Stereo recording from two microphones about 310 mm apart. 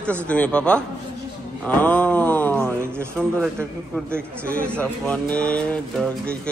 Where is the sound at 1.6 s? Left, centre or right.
Centre.